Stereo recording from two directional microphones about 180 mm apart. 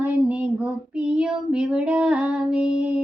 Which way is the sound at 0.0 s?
10° right (ahead or behind).